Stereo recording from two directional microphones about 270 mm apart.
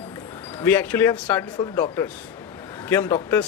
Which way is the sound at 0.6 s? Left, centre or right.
Centre.